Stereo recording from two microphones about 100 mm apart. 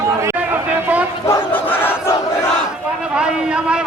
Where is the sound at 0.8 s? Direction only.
15° right (ahead or behind).